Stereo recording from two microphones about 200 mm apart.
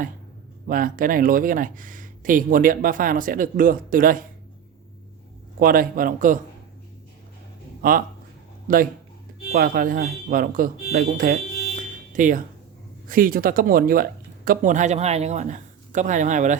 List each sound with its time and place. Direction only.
0.7 s speech: 45° right (ahead or behind)
5.5 s speech: 45° right (ahead or behind)
7.8 s speech: 45° right (ahead or behind)
11.8 s a sound: 40° right (ahead or behind)
13.1 s speech: 45° right (ahead or behind)